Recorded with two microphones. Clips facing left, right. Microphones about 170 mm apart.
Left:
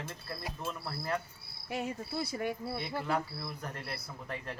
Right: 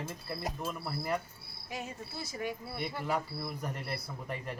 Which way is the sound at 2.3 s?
30° left (ahead or behind).